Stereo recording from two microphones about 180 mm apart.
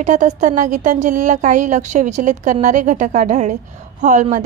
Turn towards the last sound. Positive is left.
turn(degrees=-45)  # may be behind; listen again after turning